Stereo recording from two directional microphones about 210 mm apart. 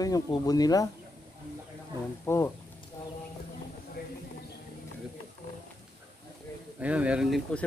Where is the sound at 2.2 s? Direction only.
10° left (ahead or behind).